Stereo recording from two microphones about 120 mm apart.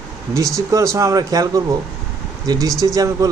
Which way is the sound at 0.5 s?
30° right (ahead or behind).